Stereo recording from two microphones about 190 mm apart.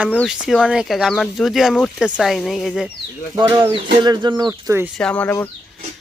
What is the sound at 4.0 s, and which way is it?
Speech, 25° right (ahead or behind).